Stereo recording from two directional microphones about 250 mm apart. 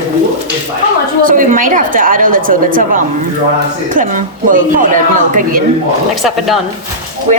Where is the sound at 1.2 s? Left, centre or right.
Right.